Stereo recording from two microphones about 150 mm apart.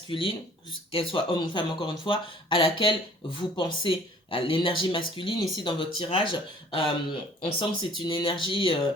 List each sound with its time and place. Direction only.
0.1 s speech: 35° left (ahead or behind)